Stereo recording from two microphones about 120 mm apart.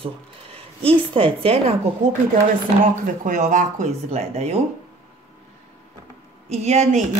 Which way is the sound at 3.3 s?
90° right.